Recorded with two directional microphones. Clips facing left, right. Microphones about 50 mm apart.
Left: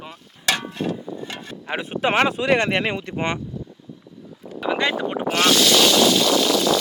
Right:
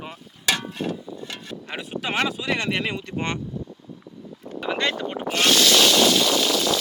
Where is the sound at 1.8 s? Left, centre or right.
Left.